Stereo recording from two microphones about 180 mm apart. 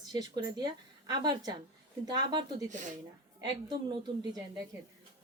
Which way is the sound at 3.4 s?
25° right (ahead or behind).